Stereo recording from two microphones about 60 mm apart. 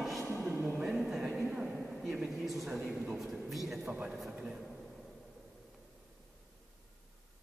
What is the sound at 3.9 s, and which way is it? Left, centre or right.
Speech, centre.